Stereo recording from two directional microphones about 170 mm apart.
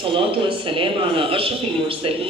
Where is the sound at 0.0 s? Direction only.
30° right (ahead or behind).